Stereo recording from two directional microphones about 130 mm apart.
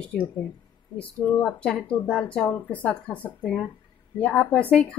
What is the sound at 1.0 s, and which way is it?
Speech, 15° left (ahead or behind).